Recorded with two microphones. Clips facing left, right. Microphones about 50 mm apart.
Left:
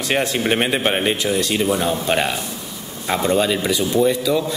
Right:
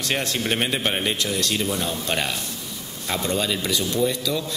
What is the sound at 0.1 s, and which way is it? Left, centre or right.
A man's voice, centre.